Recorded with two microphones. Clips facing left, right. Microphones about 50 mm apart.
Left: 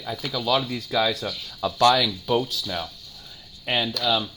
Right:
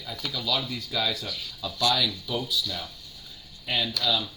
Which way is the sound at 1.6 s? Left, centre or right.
Left.